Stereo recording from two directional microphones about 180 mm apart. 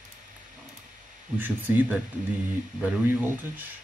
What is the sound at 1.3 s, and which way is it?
Speech, 10° right (ahead or behind).